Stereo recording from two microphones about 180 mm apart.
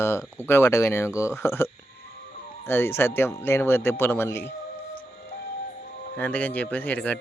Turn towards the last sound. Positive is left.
turn(degrees=10)  # may be behind; listen again after turning